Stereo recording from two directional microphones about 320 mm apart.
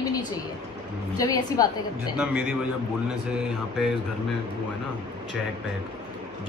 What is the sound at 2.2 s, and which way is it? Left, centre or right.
Mantra, centre.